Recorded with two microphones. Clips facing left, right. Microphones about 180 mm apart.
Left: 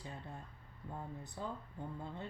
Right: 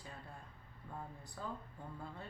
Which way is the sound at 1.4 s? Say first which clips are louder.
Left 2 dB; 20° left (ahead or behind).